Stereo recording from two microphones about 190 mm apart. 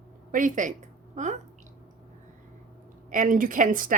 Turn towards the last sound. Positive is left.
turn(degrees=-45)  # may be behind; listen again after turning